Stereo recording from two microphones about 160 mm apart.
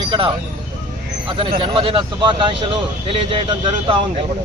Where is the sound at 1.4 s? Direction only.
30° right (ahead or behind).